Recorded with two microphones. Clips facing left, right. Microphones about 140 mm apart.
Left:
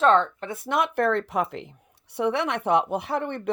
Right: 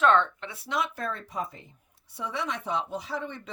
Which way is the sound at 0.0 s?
35° left (ahead or behind).